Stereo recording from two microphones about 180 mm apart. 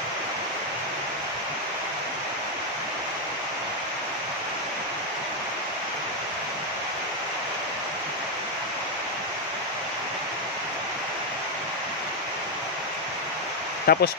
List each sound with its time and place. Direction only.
13.9 s speech: 60° left (ahead or behind)